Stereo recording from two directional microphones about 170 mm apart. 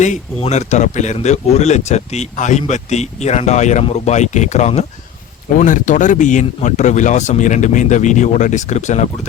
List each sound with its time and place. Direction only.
0.0 s speech: 45° left (ahead or behind)